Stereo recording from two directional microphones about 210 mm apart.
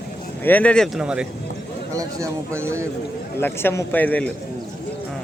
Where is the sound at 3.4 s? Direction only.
10° left (ahead or behind).